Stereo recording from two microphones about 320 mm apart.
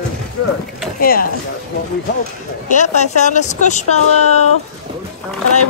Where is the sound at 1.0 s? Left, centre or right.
Left.